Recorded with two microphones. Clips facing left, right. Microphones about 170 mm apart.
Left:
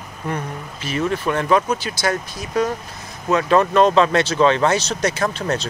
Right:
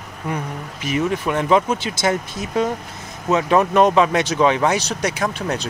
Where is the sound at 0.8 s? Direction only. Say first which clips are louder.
Right 1 dB; 15° right (ahead or behind).